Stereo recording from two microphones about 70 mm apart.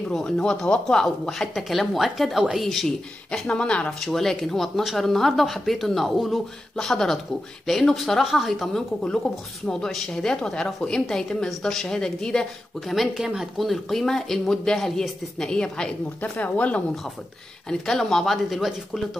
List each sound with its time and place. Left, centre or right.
0.1 s a woman's voice: centre
4.0 s a woman's voice: centre
12.9 s speech: centre
16.2 s a woman's voice: left
17.6 s speech: centre